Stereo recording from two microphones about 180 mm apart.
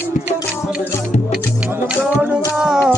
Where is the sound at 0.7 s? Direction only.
45° left (ahead or behind).